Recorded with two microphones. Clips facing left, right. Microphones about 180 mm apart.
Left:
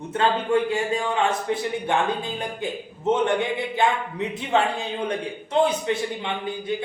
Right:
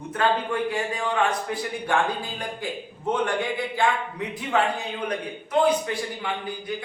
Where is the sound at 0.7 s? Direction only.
25° left (ahead or behind).